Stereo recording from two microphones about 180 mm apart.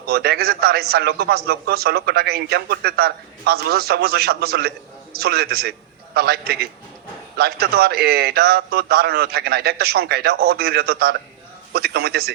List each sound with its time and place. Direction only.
0.0 s a man's voice: 60° right (ahead or behind)